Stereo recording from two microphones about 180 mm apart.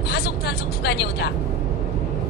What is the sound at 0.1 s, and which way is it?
Vehicle, 65° left (ahead or behind).